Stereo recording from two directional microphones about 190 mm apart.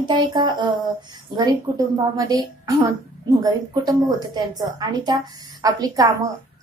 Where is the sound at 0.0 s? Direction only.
25° right (ahead or behind).